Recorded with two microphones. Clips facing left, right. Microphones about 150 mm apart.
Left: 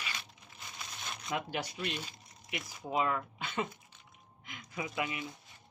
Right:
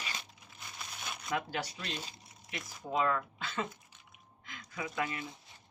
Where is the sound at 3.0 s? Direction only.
15° left (ahead or behind).